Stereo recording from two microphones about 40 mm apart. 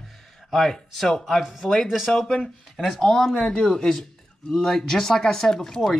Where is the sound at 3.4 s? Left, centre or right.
Left.